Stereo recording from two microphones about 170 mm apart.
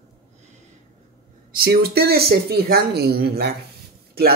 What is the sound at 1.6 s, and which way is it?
Speech, 65° right (ahead or behind).